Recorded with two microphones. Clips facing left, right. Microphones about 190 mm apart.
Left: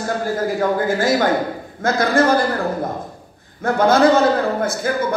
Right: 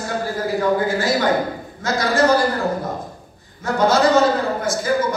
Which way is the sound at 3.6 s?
55° left (ahead or behind).